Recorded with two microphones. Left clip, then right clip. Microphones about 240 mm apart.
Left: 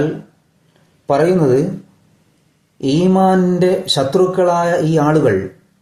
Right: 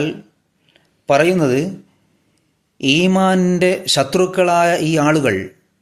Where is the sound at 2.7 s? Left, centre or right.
Right.